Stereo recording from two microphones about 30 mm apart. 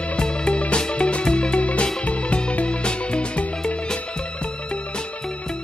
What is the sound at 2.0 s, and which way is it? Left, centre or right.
Music, left.